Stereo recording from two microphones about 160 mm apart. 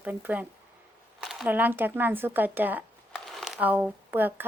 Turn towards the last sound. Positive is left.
turn(degrees=-10)  # may be behind; listen again after turning